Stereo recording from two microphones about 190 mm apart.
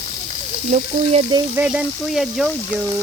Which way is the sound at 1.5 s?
5° right (ahead or behind).